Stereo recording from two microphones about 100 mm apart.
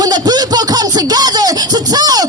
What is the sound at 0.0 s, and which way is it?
Music, 40° right (ahead or behind).